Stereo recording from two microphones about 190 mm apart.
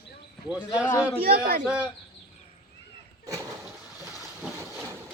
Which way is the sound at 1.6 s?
5° right (ahead or behind).